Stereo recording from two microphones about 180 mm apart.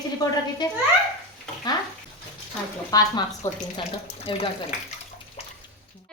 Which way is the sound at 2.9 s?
20° left (ahead or behind).